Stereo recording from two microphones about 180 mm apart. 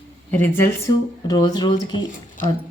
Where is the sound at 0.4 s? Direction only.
10° left (ahead or behind).